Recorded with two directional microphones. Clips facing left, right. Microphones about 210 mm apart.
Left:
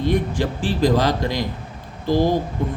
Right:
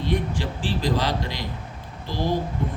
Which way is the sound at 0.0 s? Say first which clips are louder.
Left 5 dB; 45° left (ahead or behind).